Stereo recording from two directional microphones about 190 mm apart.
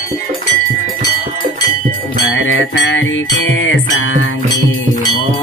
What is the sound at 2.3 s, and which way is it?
Music, 85° left.